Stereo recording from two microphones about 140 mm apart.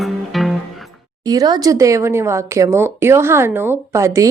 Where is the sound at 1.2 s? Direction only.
25° right (ahead or behind).